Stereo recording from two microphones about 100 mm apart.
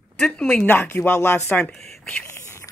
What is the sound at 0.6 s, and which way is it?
Speech, 20° left (ahead or behind).